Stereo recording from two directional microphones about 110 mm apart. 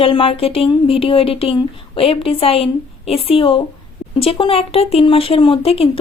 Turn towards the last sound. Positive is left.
turn(degrees=60)  # may be behind; listen again after turning